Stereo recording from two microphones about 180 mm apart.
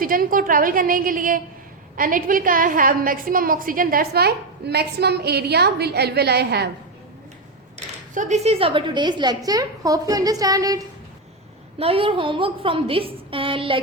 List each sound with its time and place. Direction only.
0.0 s a woman's voice: 50° right (ahead or behind)
8.1 s a woman's voice: 40° right (ahead or behind); by 10.8 s 20° right (ahead or behind)
11.8 s a woman's voice: 30° right (ahead or behind)